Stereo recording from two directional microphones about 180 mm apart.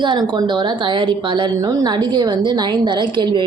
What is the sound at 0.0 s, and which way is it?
A woman's voice, 25° right (ahead or behind).